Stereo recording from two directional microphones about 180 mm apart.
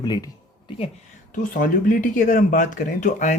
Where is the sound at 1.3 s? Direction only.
50° left (ahead or behind).